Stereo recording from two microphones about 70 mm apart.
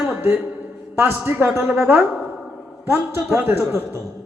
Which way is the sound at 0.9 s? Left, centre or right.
Right.